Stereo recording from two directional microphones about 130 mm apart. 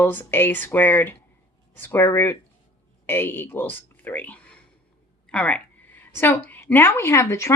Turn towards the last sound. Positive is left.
turn(degrees=20)  # may be behind; listen again after turning